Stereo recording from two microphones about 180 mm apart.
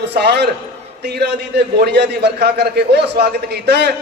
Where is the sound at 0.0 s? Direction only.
65° right (ahead or behind).